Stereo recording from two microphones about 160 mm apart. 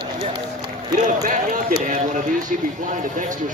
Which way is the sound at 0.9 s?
55° right (ahead or behind).